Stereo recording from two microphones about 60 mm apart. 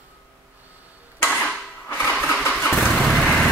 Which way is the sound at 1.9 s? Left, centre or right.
Left.